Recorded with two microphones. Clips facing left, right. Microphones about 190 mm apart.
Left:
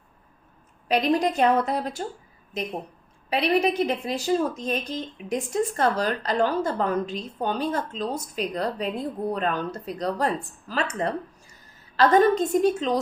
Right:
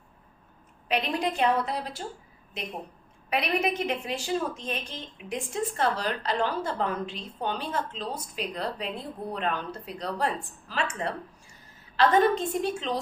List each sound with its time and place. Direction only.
0.9 s a woman's voice: 40° left (ahead or behind)